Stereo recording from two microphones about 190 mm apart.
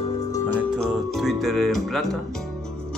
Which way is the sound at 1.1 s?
Centre (ahead or behind).